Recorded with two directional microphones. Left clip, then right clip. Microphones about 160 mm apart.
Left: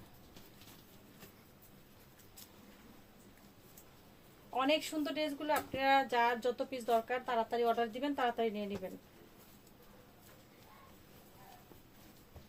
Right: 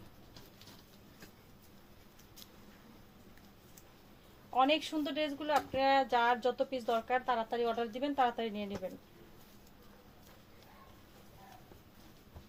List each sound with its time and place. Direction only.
4.5 s speech: 25° left (ahead or behind)